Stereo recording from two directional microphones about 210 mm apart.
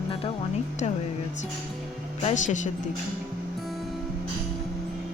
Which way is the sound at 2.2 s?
35° left (ahead or behind).